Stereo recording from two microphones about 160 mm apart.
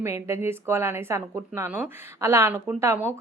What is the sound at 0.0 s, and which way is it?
A woman's voice, 15° right (ahead or behind).